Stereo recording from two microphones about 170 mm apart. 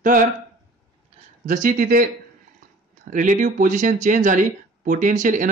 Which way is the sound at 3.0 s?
50° right (ahead or behind).